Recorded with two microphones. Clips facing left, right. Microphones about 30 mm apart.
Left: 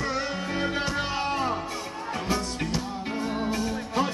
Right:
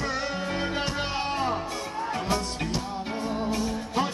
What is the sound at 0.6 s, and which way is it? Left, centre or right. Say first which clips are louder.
Music: left 3 dB; right.